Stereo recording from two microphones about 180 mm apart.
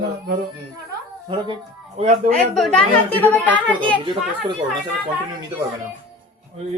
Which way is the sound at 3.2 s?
10° left (ahead or behind).